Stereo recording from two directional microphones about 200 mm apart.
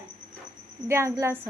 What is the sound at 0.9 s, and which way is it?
Speech, 15° right (ahead or behind).